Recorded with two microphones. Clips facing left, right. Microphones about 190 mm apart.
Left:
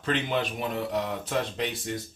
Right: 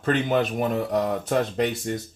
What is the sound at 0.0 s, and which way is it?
Speech, 45° right (ahead or behind).